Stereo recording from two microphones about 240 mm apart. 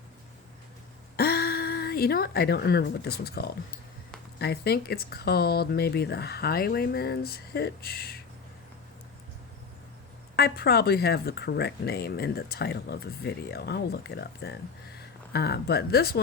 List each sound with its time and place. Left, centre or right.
1.1 s speech: left
10.3 s speech: left